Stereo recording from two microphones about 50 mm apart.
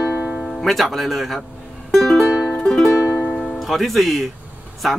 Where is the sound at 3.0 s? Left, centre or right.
Left.